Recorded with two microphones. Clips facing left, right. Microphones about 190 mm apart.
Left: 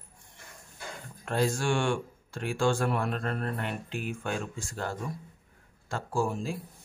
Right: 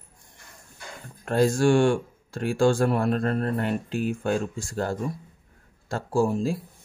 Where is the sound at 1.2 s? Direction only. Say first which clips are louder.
Right 8 dB; 40° right (ahead or behind).